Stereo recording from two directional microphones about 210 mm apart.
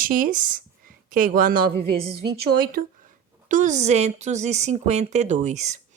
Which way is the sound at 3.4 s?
35° right (ahead or behind).